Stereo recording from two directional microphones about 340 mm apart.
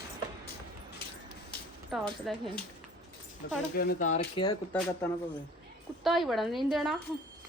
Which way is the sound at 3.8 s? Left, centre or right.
Left.